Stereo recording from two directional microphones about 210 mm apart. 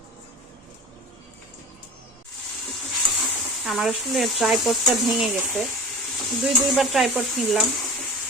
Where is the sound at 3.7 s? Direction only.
Centre (ahead or behind).